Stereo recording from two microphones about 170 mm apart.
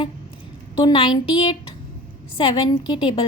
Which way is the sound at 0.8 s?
30° left (ahead or behind).